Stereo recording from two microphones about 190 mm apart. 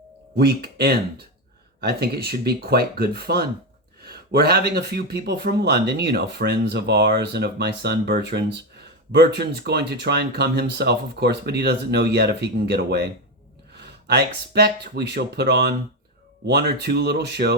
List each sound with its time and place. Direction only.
0.3 s speech: 55° right (ahead or behind)